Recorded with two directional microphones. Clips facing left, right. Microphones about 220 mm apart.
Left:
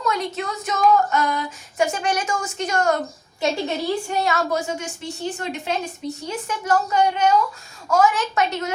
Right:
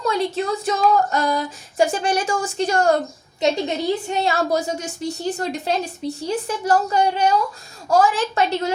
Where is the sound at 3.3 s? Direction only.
20° right (ahead or behind).